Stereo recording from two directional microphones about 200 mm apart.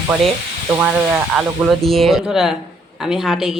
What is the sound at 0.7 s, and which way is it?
Speech, 5° right (ahead or behind).